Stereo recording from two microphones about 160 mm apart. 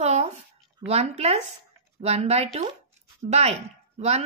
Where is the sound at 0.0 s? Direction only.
45° right (ahead or behind).